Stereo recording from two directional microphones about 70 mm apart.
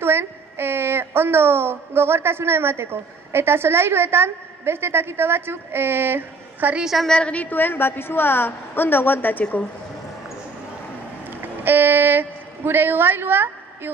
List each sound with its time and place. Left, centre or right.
0.0 s a woman's voice: right
6.7 s a woman's voice: centre
7.1 s a woman's voice: centre
11.2 s a woman's voice: right